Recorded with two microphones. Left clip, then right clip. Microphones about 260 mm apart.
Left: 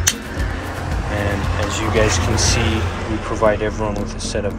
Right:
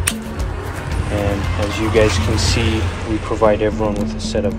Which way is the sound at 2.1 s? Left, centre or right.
Centre.